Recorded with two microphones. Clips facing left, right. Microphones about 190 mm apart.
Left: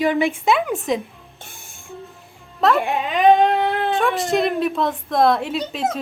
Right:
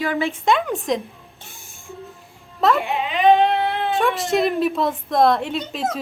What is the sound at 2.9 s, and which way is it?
Speech, 45° left (ahead or behind).